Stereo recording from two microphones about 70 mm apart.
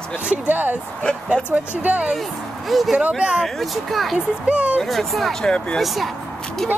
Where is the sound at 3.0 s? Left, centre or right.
Centre.